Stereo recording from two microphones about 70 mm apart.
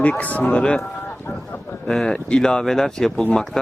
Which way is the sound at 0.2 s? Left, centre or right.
Left.